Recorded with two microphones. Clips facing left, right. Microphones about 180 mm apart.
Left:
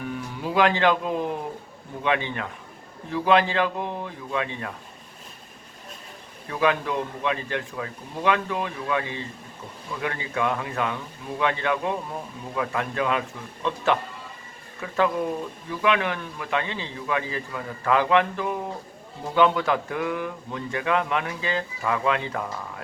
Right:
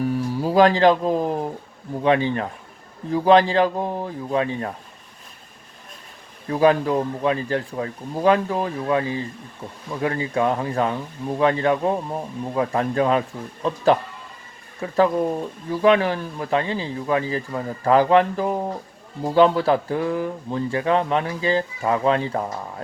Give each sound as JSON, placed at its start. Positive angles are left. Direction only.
{"t": 0.0, "sound": "music", "side_deg": -35}
{"t": 2.0, "sound": "speech", "side_deg": -35}
{"t": 6.5, "sound": "speech", "side_deg": -35}